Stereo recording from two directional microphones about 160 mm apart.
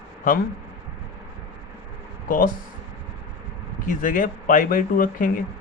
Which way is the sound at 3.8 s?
55° left (ahead or behind).